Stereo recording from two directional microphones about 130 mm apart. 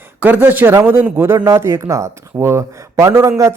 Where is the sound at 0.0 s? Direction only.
15° right (ahead or behind).